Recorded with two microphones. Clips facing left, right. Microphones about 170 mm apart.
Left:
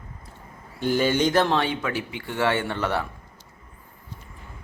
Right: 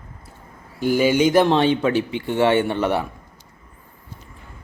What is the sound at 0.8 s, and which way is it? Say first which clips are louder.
Speech: right 4 dB; 10° right (ahead or behind).